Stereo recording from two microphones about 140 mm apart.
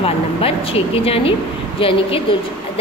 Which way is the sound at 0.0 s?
40° left (ahead or behind).